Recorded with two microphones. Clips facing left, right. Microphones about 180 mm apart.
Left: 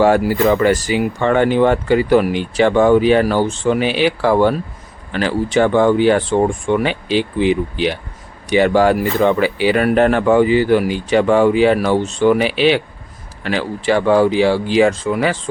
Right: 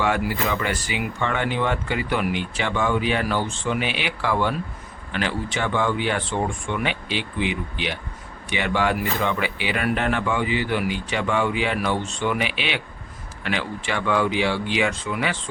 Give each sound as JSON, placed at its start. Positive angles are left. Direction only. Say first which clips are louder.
{"t": 0.0, "sound": "speech", "louder": "left 10 dB", "side_deg": 40}